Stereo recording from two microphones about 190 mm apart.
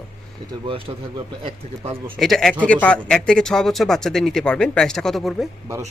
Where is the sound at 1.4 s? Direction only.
35° right (ahead or behind).